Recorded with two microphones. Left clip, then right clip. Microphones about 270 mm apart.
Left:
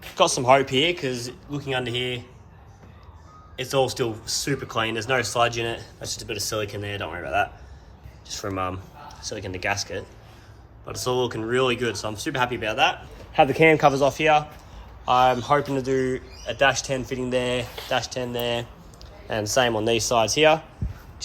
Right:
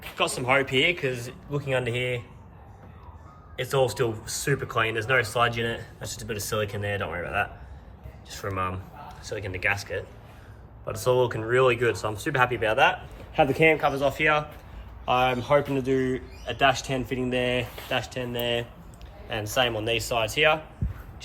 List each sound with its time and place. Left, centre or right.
0.2 s speech: centre
3.6 s speech: centre
13.6 s speech: left
13.8 s speech: centre
19.7 s speech: centre